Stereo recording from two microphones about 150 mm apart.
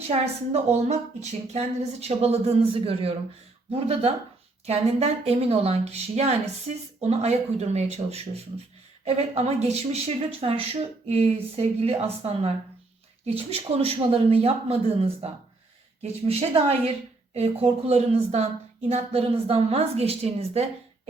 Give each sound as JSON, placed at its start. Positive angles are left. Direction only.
{"t": 0.1, "sound": "speech", "side_deg": -45}